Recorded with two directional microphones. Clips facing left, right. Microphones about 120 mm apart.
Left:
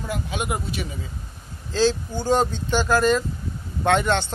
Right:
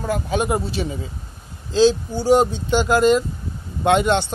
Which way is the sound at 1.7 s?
15° right (ahead or behind).